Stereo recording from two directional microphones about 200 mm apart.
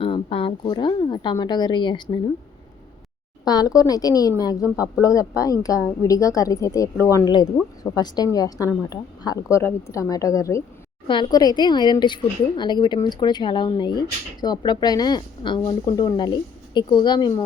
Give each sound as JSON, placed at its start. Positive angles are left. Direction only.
{"t": 0.0, "sound": "a woman's voice", "side_deg": 25}
{"t": 3.4, "sound": "a woman's voice", "side_deg": 20}